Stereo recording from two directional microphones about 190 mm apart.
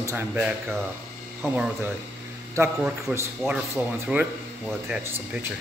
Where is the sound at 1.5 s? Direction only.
5° right (ahead or behind).